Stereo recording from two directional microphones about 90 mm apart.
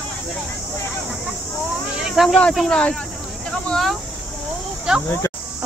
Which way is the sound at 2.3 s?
10° left (ahead or behind).